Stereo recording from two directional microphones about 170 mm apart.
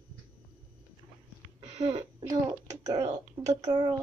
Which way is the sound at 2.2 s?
20° right (ahead or behind).